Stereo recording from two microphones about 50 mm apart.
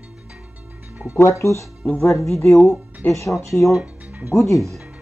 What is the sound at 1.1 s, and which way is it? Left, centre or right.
Speech, left.